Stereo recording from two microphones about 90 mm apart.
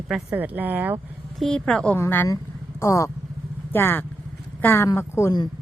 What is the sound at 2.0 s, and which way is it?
Speech, 25° left (ahead or behind).